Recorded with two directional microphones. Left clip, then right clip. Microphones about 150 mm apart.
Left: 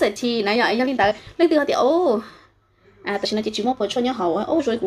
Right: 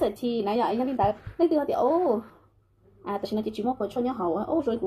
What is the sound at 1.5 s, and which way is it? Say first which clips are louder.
Speech: left 6 dB; 15° left (ahead or behind).